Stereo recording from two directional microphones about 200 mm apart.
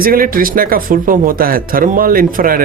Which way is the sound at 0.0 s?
45° right (ahead or behind).